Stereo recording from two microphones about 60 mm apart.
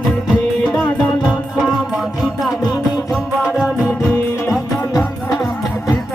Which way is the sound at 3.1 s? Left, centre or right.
Centre.